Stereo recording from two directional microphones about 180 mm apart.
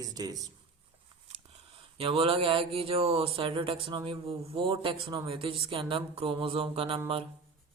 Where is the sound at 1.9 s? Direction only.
30° right (ahead or behind).